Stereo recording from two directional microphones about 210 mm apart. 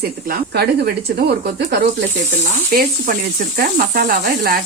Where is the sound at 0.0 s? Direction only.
50° right (ahead or behind).